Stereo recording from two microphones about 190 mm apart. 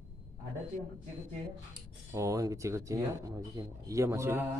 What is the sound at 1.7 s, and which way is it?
Speech, 15° right (ahead or behind).